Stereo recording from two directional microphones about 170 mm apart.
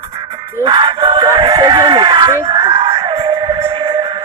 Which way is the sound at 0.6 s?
30° right (ahead or behind).